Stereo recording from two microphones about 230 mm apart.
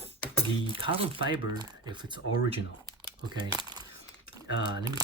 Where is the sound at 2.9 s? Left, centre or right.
Centre.